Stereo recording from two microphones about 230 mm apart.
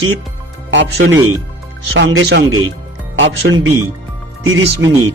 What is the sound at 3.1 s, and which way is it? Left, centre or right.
Speech, right.